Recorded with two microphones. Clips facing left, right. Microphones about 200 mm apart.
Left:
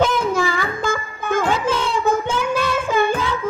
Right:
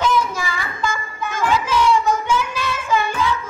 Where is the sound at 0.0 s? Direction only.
55° left (ahead or behind).